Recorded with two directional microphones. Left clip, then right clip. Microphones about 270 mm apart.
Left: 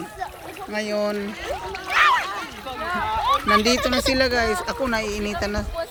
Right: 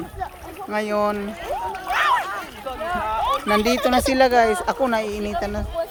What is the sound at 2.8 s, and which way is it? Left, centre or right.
Boat, right.